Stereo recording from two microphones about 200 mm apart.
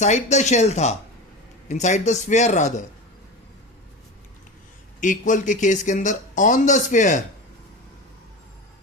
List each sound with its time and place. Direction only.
0.0 s speech: 35° left (ahead or behind)
4.9 s speech: 40° left (ahead or behind)